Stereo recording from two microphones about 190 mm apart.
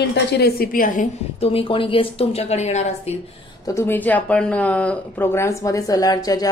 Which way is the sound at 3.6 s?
15° left (ahead or behind).